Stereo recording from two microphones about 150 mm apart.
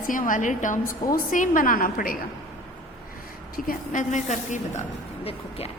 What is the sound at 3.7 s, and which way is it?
Speech, 55° left (ahead or behind).